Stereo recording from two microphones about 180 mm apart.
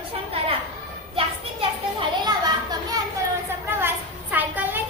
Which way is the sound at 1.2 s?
30° right (ahead or behind).